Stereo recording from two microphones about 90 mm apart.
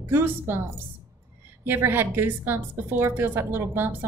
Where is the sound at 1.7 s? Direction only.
25° right (ahead or behind).